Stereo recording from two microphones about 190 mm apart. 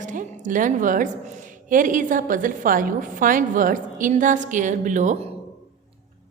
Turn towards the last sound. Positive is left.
turn(degrees=-40)  # may be behind; listen again after turning